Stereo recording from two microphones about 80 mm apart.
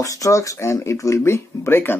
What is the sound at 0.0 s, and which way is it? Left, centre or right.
Speech, left.